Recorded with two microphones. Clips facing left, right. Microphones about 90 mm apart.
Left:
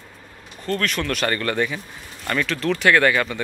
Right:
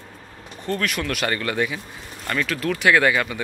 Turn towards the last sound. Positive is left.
turn(degrees=-10)  # may be behind; listen again after turning